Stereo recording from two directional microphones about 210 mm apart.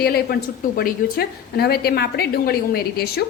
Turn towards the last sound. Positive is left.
turn(degrees=50)  # may be behind; listen again after turning